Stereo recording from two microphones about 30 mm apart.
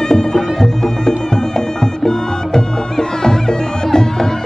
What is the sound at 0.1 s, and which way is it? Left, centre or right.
Music, left.